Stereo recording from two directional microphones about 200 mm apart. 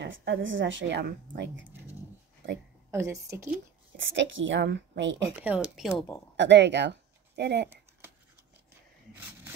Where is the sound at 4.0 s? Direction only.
70° right (ahead or behind).